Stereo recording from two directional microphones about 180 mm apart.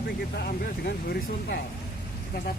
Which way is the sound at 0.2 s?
60° left (ahead or behind).